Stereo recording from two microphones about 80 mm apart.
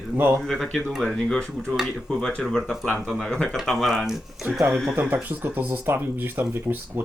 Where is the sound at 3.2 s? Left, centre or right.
Centre.